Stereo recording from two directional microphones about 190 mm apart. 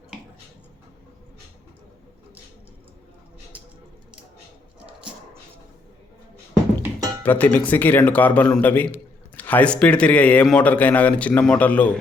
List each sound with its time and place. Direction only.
7.2 s speech: 10° left (ahead or behind)